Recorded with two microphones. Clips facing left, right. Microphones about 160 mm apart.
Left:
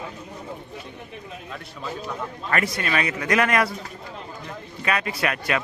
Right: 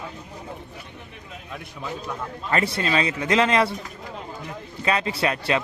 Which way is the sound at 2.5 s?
30° right (ahead or behind).